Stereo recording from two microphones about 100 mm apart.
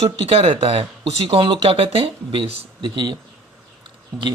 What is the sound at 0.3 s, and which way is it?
Speech, 85° right.